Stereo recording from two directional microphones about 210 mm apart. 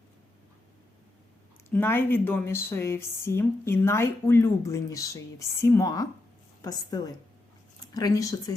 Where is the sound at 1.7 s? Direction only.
10° left (ahead or behind).